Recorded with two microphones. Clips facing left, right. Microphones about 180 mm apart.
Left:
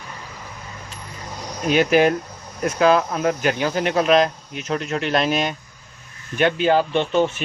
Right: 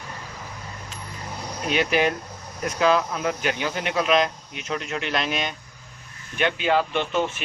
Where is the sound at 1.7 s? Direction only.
45° left (ahead or behind).